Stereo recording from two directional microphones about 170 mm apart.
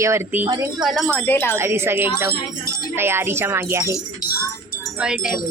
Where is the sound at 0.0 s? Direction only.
15° right (ahead or behind).